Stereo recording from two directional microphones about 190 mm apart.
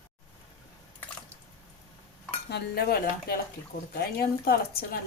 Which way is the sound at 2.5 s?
60° left (ahead or behind).